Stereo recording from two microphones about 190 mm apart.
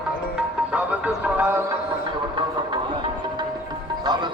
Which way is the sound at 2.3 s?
25° right (ahead or behind).